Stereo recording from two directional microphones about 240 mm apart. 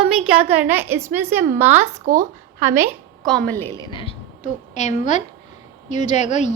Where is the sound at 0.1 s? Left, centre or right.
Centre.